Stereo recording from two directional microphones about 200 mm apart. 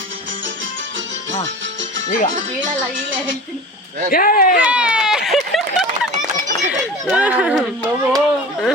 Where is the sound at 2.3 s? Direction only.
40° right (ahead or behind).